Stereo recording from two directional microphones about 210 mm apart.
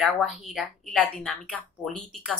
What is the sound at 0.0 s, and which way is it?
Speech, centre (ahead or behind).